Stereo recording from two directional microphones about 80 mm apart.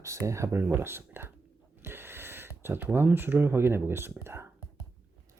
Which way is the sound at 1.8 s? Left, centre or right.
Right.